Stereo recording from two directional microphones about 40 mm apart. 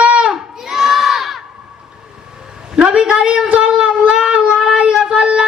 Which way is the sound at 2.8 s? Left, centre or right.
Right.